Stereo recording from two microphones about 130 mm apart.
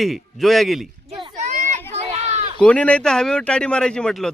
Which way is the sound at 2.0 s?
55° right (ahead or behind).